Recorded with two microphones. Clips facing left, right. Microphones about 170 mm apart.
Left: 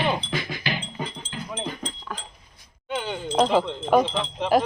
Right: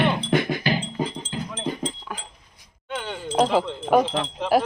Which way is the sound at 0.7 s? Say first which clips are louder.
Right 6 dB; 35° right (ahead or behind).